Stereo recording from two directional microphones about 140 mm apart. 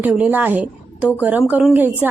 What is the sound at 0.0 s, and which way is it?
A woman's voice, 10° right (ahead or behind).